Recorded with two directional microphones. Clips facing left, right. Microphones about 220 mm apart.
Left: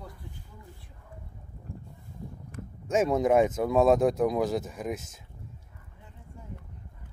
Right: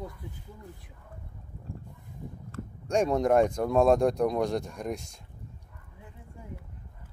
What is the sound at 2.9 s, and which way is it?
Speech, 5° left (ahead or behind).